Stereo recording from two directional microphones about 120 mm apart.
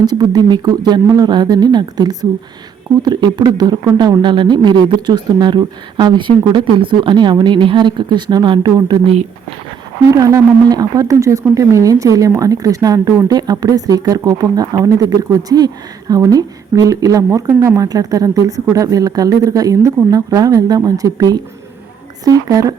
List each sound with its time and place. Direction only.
0.0 s speech: 35° right (ahead or behind)
10.1 s speech: 25° right (ahead or behind)